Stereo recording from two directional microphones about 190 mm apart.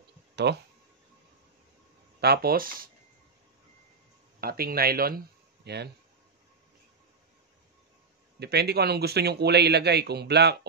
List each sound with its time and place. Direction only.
0.5 s speech: 65° right (ahead or behind)
2.1 s speech: 55° right (ahead or behind)
4.4 s speech: 50° right (ahead or behind)
8.4 s speech: 60° right (ahead or behind)